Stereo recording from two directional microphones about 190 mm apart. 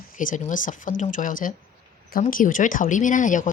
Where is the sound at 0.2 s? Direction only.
45° left (ahead or behind).